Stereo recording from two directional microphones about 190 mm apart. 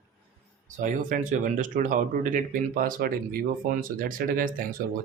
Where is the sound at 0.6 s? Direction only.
40° right (ahead or behind).